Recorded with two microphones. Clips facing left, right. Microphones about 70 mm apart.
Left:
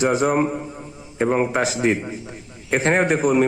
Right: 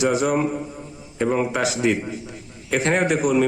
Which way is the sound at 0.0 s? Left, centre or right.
Left.